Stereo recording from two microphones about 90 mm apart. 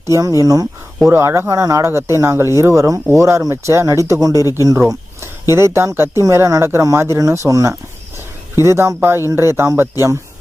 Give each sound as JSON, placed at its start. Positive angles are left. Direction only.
{"t": 0.0, "sound": "speech", "side_deg": -40}
{"t": 1.0, "sound": "speech", "side_deg": -30}
{"t": 4.4, "sound": "speech", "side_deg": 40}
{"t": 5.2, "sound": "speech", "side_deg": -30}
{"t": 6.2, "sound": "speech", "side_deg": -35}